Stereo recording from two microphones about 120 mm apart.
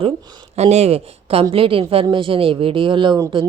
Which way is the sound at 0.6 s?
60° right (ahead or behind).